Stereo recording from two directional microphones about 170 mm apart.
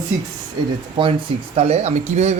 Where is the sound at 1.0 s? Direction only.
30° right (ahead or behind).